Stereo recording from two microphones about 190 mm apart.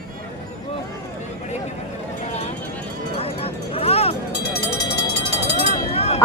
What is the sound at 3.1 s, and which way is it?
Speech, 30° left (ahead or behind).